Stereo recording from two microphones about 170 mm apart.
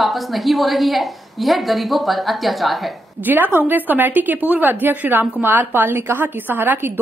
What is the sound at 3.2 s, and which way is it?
A woman's voice, 10° right (ahead or behind).